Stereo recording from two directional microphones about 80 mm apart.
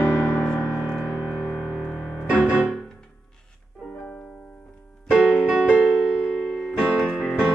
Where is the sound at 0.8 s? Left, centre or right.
Centre.